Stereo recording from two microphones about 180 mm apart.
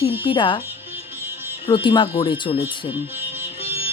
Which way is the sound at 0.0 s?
30° left (ahead or behind).